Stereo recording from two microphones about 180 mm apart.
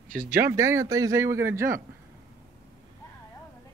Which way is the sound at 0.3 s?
15° right (ahead or behind).